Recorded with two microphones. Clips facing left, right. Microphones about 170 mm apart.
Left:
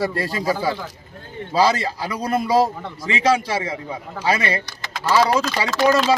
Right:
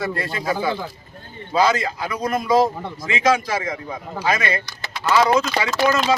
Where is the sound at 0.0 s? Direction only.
35° left (ahead or behind).